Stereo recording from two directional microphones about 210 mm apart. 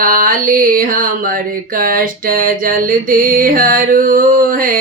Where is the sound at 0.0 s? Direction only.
40° right (ahead or behind).